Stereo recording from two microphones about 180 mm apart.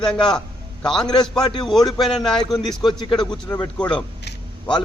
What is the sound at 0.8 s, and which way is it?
Speech, 5° left (ahead or behind).